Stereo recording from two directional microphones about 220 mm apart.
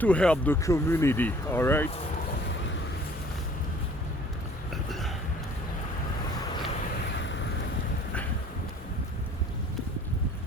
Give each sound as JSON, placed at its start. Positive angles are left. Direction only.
{"t": 0.0, "sound": "speech", "side_deg": 5}
{"t": 7.2, "sound": "vehicle", "side_deg": 55}